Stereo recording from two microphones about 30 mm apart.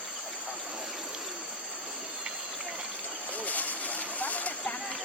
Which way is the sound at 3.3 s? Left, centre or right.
Left.